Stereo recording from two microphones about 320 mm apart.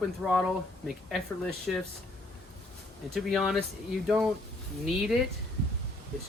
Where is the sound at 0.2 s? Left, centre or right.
Centre.